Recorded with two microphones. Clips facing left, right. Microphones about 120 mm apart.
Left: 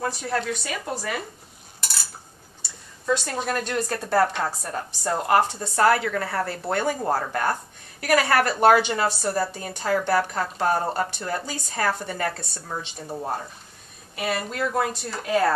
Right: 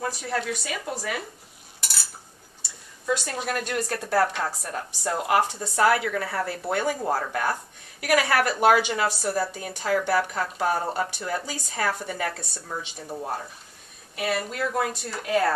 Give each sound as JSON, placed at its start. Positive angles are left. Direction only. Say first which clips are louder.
{"t": 0.0, "sound": "a woman's voice", "louder": "left 2 dB", "side_deg": -5}
{"t": 3.1, "sound": "a woman's voice", "louder": "left 2 dB", "side_deg": -5}
{"t": 13.0, "sound": "speech", "louder": "left 2 dB", "side_deg": 15}
{"t": 14.1, "sound": "a woman's voice", "louder": "even", "side_deg": 0}